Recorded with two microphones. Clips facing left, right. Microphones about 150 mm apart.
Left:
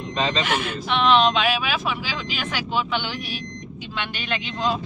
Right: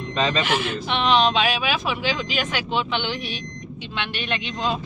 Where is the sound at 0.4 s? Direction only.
Centre (ahead or behind).